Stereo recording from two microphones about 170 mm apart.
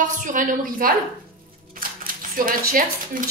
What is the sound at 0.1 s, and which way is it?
Speech, 50° right (ahead or behind).